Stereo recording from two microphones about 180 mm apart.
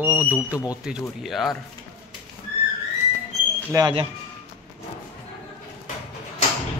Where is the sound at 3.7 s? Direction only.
20° right (ahead or behind).